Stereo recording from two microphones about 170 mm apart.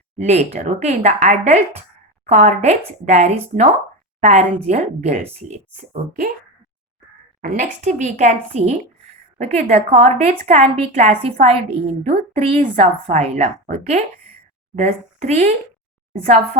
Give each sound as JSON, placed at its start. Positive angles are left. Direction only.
{"t": 0.3, "sound": "a woman's voice", "side_deg": -40}
{"t": 7.4, "sound": "a woman's voice", "side_deg": -45}
{"t": 9.4, "sound": "a woman's voice", "side_deg": -40}